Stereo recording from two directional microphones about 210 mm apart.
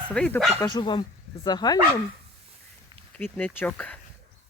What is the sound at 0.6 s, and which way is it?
Speech, 20° left (ahead or behind).